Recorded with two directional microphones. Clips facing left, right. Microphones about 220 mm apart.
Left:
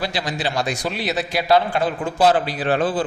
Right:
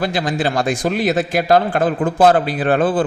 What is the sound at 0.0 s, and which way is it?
Speech, 50° right (ahead or behind).